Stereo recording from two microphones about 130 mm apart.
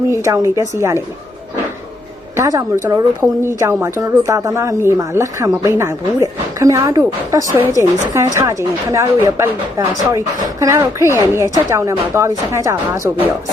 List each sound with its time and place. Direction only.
0.1 s speech: 25° right (ahead or behind)
2.3 s speech: 25° right (ahead or behind)